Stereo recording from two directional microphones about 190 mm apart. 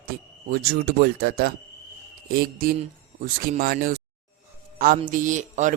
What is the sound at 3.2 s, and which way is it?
A man's voice, 50° right (ahead or behind).